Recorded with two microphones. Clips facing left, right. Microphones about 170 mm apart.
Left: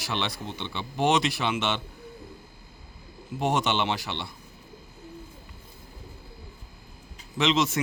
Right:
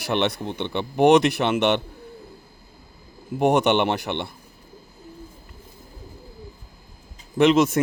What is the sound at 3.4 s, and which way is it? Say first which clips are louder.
Speech: right 7 dB; 60° right (ahead or behind).